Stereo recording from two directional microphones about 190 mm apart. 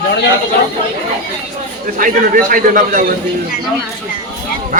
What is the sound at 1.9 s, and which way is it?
A man's voice, 45° right (ahead or behind).